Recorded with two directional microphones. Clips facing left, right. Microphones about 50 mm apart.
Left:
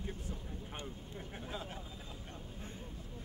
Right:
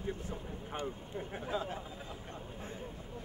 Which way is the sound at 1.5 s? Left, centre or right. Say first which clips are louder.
Right 8 dB; right.